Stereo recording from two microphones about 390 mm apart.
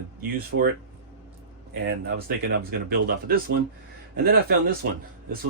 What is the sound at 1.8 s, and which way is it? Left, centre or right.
Speech, right.